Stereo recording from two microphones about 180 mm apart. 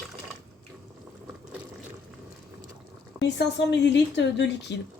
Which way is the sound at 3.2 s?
70° left (ahead or behind).